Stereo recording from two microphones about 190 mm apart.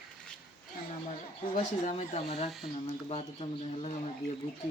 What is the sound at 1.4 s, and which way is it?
Speech, 50° left (ahead or behind).